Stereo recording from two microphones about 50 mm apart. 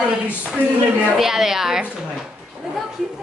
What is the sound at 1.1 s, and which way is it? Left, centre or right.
Speech, centre.